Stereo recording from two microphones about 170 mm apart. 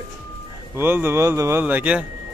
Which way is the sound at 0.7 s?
15° right (ahead or behind).